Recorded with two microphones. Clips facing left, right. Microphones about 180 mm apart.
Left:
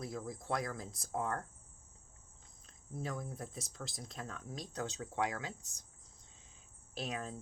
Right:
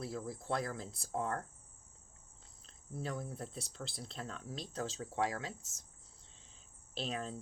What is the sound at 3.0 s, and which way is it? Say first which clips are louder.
Speech: right 1 dB; 30° right (ahead or behind).